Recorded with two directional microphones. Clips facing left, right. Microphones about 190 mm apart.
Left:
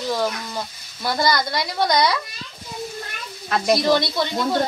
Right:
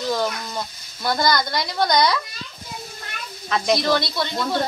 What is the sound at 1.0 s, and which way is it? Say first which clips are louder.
A woman's voice: even; 5° left (ahead or behind).